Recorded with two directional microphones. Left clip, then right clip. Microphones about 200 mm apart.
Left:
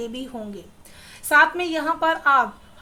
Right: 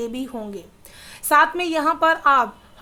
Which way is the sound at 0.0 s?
35° right (ahead or behind).